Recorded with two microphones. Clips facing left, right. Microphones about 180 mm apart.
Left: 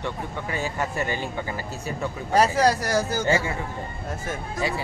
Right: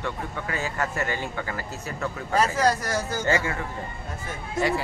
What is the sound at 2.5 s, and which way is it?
Speech, 35° left (ahead or behind).